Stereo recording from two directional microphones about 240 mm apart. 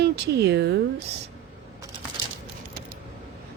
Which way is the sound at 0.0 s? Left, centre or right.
Right.